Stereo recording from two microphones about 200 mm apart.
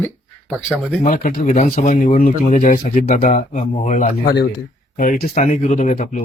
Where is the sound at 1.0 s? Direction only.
40° left (ahead or behind).